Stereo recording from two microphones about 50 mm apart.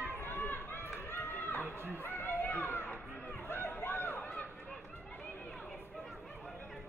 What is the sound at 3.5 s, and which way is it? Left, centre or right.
Chatter, left.